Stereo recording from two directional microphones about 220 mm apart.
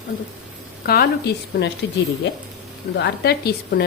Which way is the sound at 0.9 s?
45° left (ahead or behind).